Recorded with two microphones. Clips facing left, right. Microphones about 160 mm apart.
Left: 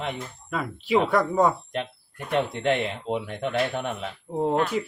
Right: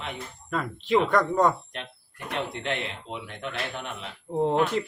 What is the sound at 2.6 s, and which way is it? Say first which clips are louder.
Speech: left 7 dB; 50° left (ahead or behind).